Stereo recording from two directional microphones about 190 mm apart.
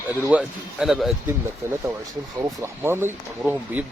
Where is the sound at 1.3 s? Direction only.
15° right (ahead or behind).